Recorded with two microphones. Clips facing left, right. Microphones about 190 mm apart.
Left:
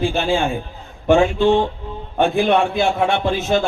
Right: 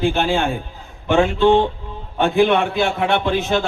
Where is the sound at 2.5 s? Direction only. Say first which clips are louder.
Left 1 dB; 60° right (ahead or behind).